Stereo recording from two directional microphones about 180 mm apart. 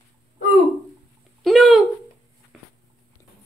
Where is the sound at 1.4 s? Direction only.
Centre (ahead or behind).